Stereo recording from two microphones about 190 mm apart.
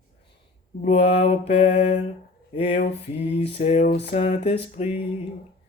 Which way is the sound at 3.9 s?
60° left (ahead or behind).